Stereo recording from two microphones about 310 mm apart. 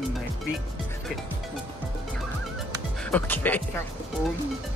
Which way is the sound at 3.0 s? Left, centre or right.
Centre.